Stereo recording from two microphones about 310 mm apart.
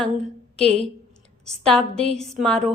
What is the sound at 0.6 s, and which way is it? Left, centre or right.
Speech, centre.